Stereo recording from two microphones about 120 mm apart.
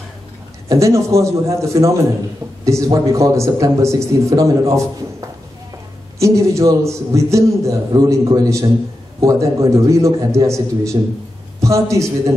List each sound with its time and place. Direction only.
0.7 s a man's voice: 25° right (ahead or behind)
6.1 s a man's voice: 25° right (ahead or behind)